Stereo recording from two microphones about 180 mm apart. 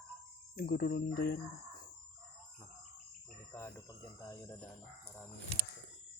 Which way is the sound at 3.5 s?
15° left (ahead or behind).